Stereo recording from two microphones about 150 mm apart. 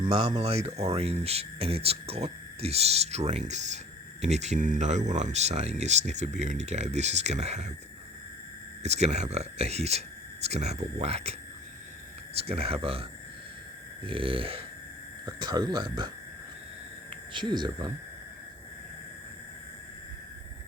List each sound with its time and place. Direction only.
0.3 s speech: 45° right (ahead or behind)
8.8 s speech: 50° right (ahead or behind)
12.4 s speech: 40° right (ahead or behind)
15.3 s speech: 25° right (ahead or behind)
17.3 s speech: 30° right (ahead or behind)